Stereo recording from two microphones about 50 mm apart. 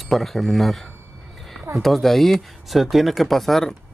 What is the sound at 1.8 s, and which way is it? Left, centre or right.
Speech, centre.